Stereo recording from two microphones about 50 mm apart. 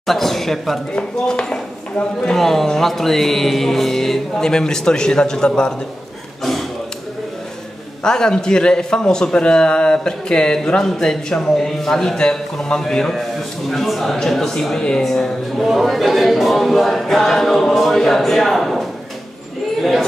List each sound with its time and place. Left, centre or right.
0.0 s speech: centre
0.9 s a man's voice: centre
8.0 s a man's voice: centre